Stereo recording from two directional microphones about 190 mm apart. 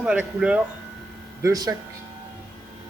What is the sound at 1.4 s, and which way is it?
Speech, 20° right (ahead or behind).